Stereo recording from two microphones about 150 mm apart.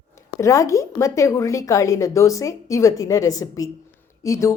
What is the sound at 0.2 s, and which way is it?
A woman's voice, 20° left (ahead or behind).